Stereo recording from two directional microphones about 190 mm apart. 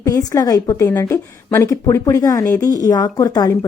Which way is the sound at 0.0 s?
20° left (ahead or behind).